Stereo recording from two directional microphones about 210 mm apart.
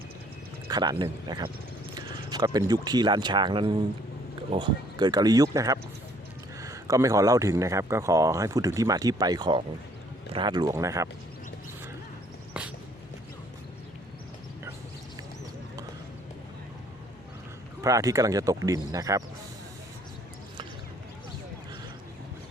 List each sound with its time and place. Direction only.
0.7 s a man's voice: 20° right (ahead or behind)
12.6 s a sound: 5° right (ahead or behind)
17.8 s a man's voice: 15° right (ahead or behind)